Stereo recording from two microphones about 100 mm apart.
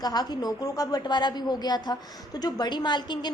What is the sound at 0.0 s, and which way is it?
A woman's voice, 40° left (ahead or behind).